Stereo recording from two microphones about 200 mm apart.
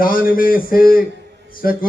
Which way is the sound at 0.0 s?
45° left (ahead or behind).